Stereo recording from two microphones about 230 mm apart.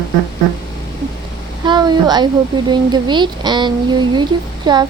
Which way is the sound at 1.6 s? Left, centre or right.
Centre.